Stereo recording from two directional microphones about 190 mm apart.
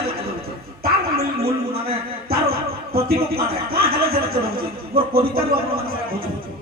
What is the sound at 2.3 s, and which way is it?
Music, 55° right (ahead or behind).